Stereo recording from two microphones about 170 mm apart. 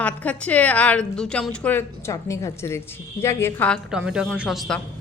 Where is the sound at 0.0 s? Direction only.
10° left (ahead or behind).